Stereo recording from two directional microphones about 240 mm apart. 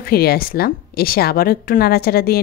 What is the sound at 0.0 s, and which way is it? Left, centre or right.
A woman's voice, left.